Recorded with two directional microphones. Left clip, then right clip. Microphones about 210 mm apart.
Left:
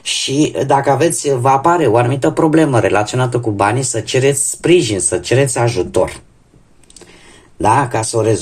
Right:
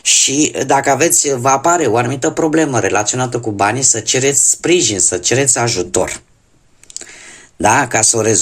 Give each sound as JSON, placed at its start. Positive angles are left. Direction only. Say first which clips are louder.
{"t": 0.0, "sound": "speech", "louder": "right 2 dB", "side_deg": -30}
{"t": 7.6, "sound": "speech", "louder": "right 1 dB", "side_deg": -30}